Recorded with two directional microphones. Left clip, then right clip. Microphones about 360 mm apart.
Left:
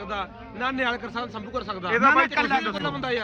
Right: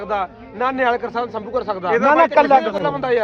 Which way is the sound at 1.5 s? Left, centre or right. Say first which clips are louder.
Right 7 dB; centre.